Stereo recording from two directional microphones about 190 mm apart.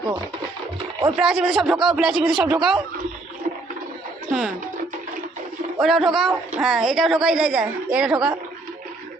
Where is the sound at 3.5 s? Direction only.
40° right (ahead or behind).